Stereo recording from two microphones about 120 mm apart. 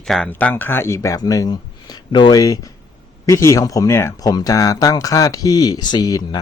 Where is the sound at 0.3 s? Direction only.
15° left (ahead or behind).